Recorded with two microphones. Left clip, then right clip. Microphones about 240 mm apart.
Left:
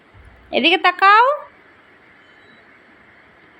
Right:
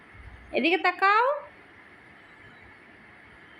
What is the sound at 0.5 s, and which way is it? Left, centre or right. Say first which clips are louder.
Speech: left 9 dB; centre.